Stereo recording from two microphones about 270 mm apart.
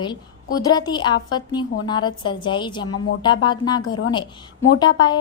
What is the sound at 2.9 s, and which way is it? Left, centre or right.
Speech, left.